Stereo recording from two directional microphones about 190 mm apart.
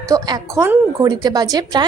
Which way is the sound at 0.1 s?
20° right (ahead or behind).